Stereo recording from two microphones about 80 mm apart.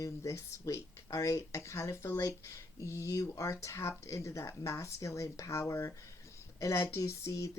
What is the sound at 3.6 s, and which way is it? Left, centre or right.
Speech, left.